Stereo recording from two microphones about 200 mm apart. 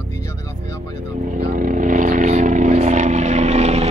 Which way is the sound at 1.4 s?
40° right (ahead or behind).